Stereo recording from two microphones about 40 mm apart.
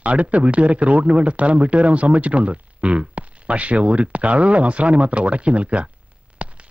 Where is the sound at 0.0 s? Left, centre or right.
Right.